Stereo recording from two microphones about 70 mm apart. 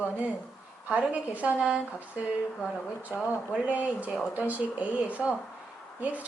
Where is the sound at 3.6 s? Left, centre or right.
Centre.